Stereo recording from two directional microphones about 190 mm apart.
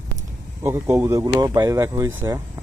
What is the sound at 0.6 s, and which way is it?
Speech, 15° right (ahead or behind).